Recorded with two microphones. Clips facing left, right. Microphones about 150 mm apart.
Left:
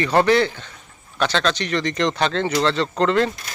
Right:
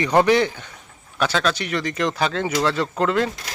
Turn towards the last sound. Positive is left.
turn(degrees=-5)  # may be behind; listen again after turning